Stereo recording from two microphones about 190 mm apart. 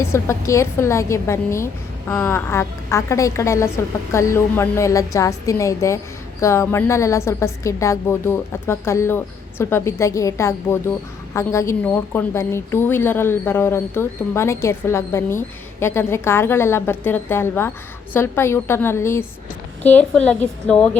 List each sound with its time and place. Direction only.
0.0 s a woman's voice: 15° left (ahead or behind)